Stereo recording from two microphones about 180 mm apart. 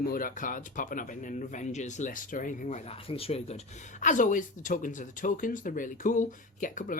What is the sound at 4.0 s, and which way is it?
Speech, 45° left (ahead or behind).